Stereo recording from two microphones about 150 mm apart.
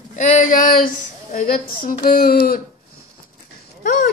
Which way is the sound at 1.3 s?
65° left (ahead or behind).